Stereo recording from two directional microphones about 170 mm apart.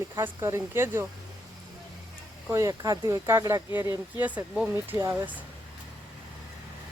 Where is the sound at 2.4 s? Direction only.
20° right (ahead or behind).